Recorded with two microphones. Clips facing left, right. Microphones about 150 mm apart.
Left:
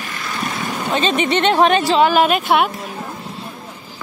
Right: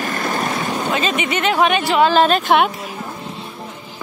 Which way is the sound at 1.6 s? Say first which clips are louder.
Left 1 dB; 35° left (ahead or behind).